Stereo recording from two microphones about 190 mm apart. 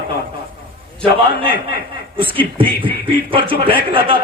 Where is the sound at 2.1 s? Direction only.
25° right (ahead or behind).